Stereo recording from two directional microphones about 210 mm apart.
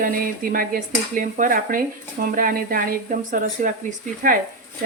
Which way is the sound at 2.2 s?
45° right (ahead or behind).